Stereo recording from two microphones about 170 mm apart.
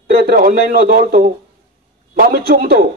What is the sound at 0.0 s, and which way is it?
Speech, 65° right (ahead or behind).